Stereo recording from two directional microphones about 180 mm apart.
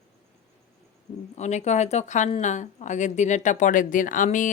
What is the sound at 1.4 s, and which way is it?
A woman's voice, 40° left (ahead or behind).